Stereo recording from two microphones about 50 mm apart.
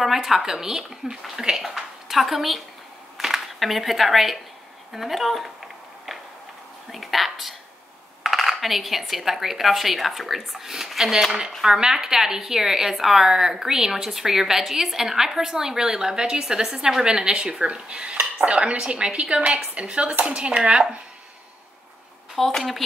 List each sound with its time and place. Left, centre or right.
0.0 s a woman's voice: centre
4.9 s a sound: centre
6.9 s a woman's voice: centre
20.3 s dishes: right
22.3 s speech: centre